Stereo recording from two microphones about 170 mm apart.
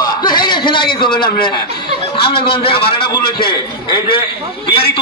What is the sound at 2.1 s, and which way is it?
A man's voice, 30° left (ahead or behind).